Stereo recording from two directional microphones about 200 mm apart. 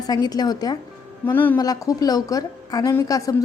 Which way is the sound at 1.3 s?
10° left (ahead or behind).